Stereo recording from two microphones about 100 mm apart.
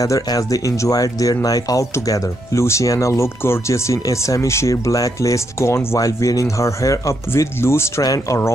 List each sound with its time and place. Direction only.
0.0 s speech: 35° left (ahead or behind)